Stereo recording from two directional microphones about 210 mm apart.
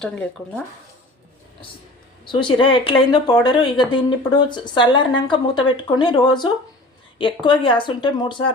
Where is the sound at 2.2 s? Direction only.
20° left (ahead or behind).